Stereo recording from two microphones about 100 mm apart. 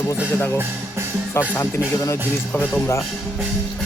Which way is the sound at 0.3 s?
20° left (ahead or behind).